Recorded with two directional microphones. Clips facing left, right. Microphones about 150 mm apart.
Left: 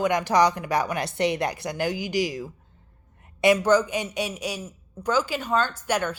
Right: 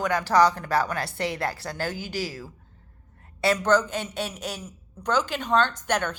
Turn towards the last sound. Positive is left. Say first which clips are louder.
# left 1 dB
turn(degrees=10)  # may be behind; listen again after turning